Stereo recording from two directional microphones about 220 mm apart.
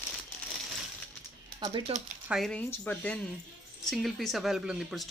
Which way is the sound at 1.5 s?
20° right (ahead or behind).